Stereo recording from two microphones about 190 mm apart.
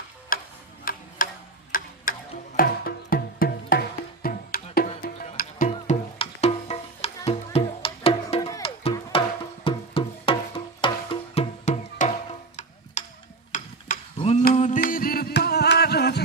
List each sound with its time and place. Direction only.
0.3 s tick-tock: 50° left (ahead or behind)
2.6 s music: 50° left (ahead or behind)
5.6 s music: 35° left (ahead or behind)
8.4 s music: 15° left (ahead or behind)
8.6 s music: 30° left (ahead or behind)
13.0 s tick-tock: 40° left (ahead or behind)
13.5 s a sound: 40° left (ahead or behind)
14.5 s music: 40° left (ahead or behind); by 16.2 s 60° left (ahead or behind)